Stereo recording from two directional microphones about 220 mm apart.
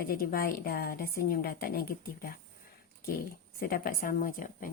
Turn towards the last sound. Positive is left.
turn(degrees=40)  # may be behind; listen again after turning